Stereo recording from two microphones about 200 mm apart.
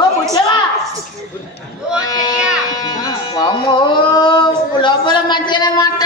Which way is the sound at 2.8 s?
20° left (ahead or behind).